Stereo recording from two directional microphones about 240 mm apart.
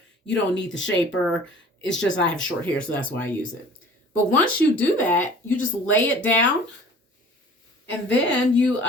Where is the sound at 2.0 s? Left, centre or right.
Centre.